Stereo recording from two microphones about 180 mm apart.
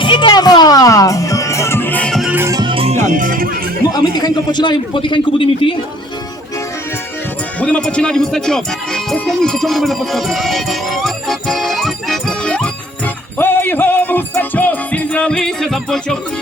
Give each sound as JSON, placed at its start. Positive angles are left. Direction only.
{"t": 0.0, "sound": "music", "side_deg": 25}
{"t": 2.3, "sound": "music", "side_deg": -15}
{"t": 3.9, "sound": "a man's voice", "side_deg": 20}
{"t": 7.6, "sound": "speech", "side_deg": 5}
{"t": 13.4, "sound": "music", "side_deg": 10}